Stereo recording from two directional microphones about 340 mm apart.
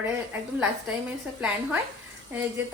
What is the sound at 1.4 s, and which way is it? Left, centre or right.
Speech, centre.